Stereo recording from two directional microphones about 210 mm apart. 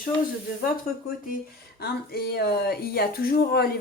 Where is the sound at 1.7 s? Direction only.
50° left (ahead or behind).